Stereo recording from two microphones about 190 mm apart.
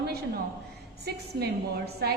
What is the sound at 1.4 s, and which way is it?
Speech, 55° right (ahead or behind).